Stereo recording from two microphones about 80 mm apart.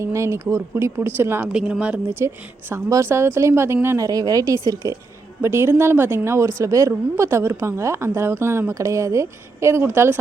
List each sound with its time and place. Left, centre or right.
0.0 s a woman's voice: right
1.5 s speech: centre
2.9 s a woman's voice: right
5.4 s a woman's voice: right